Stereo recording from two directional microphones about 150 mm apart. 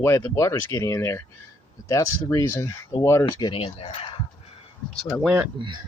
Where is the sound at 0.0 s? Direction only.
15° left (ahead or behind).